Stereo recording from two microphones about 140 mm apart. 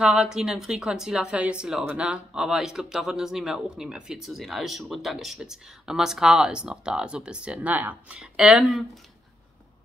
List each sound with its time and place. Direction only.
0.0 s speech: 5° right (ahead or behind)